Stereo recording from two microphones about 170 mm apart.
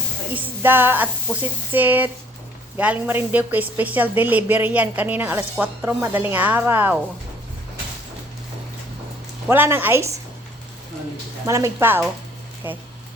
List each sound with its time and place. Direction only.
0.6 s speech: 10° right (ahead or behind)
9.5 s speech: 10° right (ahead or behind)
11.4 s speech: 15° right (ahead or behind)